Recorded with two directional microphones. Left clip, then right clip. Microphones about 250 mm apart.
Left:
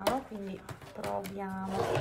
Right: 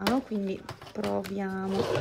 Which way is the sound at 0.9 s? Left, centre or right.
Right.